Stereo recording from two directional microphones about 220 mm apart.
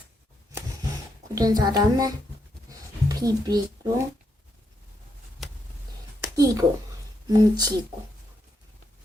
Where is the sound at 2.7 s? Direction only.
15° right (ahead or behind).